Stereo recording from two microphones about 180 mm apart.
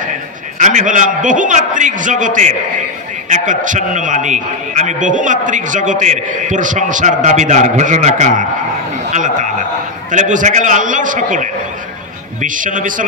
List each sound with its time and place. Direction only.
0.6 s a man's voice: 45° right (ahead or behind)